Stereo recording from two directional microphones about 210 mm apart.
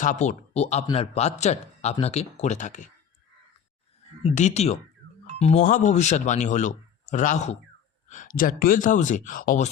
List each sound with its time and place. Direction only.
0.0 s speech: 35° left (ahead or behind)
4.2 s speech: 30° left (ahead or behind)